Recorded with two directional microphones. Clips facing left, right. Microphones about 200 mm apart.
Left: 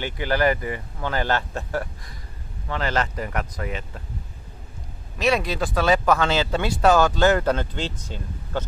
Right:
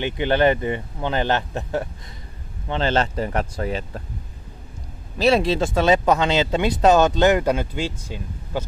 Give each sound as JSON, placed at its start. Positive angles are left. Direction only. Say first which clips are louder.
{"t": 0.0, "sound": "speech", "louder": "right 4 dB", "side_deg": -25}
{"t": 5.2, "sound": "speech", "louder": "right 4 dB", "side_deg": -30}